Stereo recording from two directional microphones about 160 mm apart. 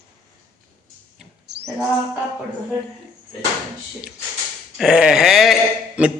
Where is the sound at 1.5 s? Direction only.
90° right.